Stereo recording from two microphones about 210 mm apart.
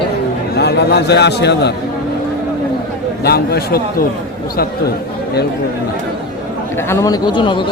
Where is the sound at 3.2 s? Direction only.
50° left (ahead or behind).